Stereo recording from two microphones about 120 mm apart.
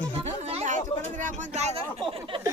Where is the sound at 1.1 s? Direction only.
90° right; by 1.8 s 70° right (ahead or behind).